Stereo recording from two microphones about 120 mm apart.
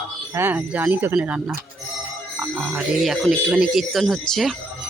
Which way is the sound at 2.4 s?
10° right (ahead or behind).